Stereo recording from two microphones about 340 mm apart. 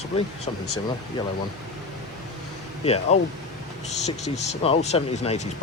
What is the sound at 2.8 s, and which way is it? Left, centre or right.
Speech, centre.